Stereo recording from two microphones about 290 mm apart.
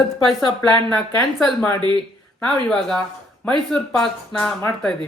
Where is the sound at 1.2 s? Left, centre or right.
Centre.